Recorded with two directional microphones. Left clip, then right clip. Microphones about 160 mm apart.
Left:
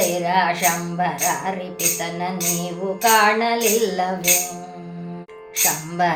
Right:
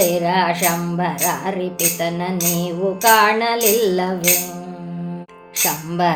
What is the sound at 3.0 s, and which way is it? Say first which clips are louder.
Speech: right 2 dB; 35° right (ahead or behind).